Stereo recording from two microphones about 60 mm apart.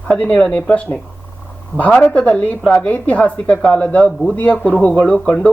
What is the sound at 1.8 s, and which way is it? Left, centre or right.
Speech, left.